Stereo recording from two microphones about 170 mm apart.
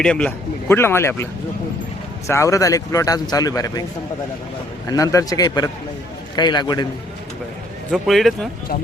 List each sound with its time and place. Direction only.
0.0 s a man's voice: 5° left (ahead or behind); by 3.8 s 20° left (ahead or behind)
4.9 s speech: 20° left (ahead or behind)
7.9 s speech: centre (ahead or behind)